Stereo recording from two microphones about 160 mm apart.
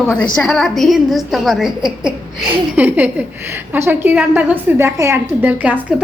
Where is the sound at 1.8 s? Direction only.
5° right (ahead or behind).